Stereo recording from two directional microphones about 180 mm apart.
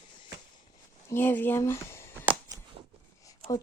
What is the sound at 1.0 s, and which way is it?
Speech, 10° left (ahead or behind).